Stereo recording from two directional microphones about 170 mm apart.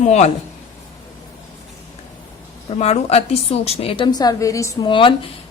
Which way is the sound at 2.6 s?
35° left (ahead or behind).